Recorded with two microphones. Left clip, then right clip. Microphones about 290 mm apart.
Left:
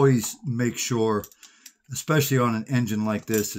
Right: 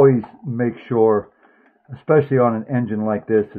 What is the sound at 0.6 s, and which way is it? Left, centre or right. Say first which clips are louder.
Speech: right 8 dB; left.